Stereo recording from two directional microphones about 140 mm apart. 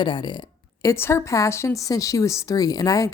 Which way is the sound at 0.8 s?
20° left (ahead or behind).